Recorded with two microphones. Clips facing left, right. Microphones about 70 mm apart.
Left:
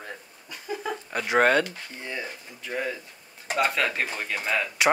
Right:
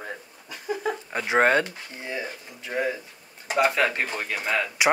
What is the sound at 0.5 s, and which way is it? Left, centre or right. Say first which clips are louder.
Speech: right 4 dB; centre.